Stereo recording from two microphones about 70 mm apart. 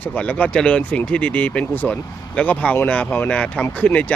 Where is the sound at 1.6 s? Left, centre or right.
Left.